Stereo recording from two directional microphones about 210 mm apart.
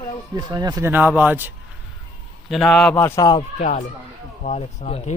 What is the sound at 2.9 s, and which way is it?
Speech, 15° left (ahead or behind).